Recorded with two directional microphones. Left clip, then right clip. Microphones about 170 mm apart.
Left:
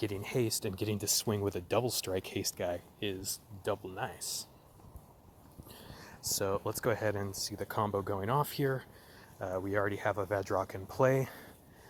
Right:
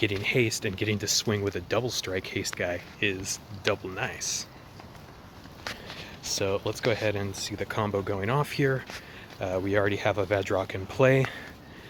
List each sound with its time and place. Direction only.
0.0 s speech: 20° left (ahead or behind)
3.6 s speech: 15° left (ahead or behind)
6.2 s speech: 30° left (ahead or behind)
9.4 s speech: 10° left (ahead or behind)